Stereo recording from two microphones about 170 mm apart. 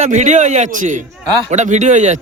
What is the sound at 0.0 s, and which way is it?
Speech, 45° right (ahead or behind).